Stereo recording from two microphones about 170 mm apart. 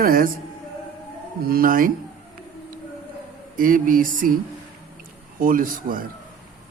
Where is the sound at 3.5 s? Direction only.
55° right (ahead or behind).